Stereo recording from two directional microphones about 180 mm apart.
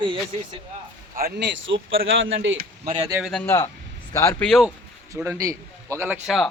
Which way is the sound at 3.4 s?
15° left (ahead or behind).